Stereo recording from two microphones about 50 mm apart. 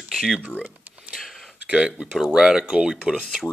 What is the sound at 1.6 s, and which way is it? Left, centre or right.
Speech, centre.